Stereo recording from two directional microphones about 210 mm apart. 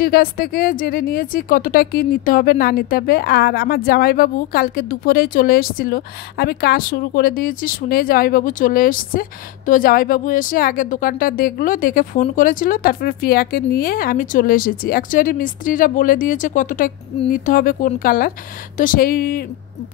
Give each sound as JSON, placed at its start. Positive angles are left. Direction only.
{"t": 0.0, "sound": "a woman's voice", "side_deg": 45}